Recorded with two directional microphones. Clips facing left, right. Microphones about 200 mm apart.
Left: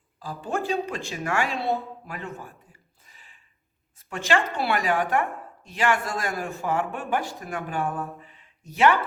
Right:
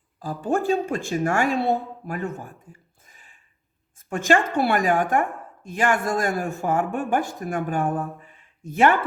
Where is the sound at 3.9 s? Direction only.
50° right (ahead or behind).